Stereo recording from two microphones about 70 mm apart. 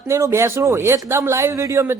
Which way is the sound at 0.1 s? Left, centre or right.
Right.